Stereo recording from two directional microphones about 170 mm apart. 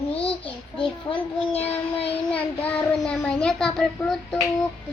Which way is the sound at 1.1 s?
35° left (ahead or behind).